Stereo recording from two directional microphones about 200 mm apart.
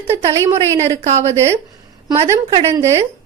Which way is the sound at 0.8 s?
30° right (ahead or behind).